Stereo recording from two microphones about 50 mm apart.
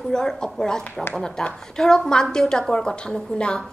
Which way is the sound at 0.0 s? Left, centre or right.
Centre.